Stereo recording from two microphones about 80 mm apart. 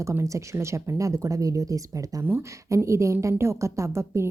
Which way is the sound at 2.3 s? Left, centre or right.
Right.